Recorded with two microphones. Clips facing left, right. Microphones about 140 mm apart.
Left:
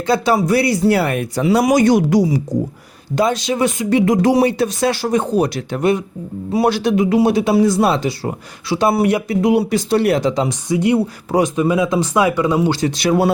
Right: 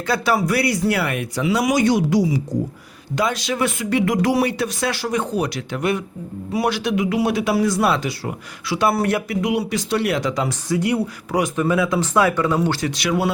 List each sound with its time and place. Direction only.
0.1 s speech: 25° left (ahead or behind); by 2.4 s 50° left (ahead or behind)
3.2 s speech: 25° left (ahead or behind)
8.9 s speech: 15° left (ahead or behind)
9.3 s speech: 30° left (ahead or behind); by 12.9 s 15° left (ahead or behind)
13.0 s speech: 35° left (ahead or behind)